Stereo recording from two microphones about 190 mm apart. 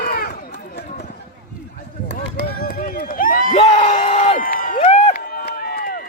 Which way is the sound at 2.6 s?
50° left (ahead or behind).